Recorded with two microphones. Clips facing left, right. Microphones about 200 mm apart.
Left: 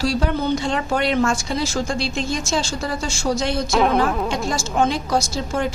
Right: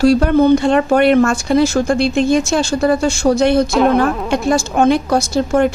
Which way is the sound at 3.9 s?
60° right (ahead or behind).